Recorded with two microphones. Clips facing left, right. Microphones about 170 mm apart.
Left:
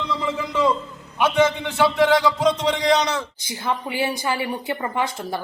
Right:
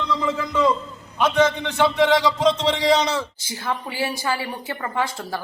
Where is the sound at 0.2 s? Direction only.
10° left (ahead or behind).